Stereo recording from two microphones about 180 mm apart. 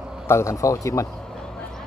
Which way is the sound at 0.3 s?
15° left (ahead or behind).